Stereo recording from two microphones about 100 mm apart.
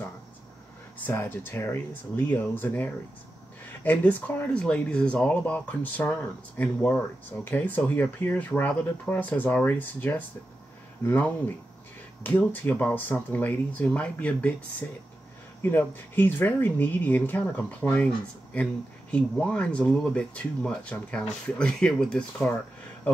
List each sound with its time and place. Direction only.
0.9 s speech: 20° left (ahead or behind)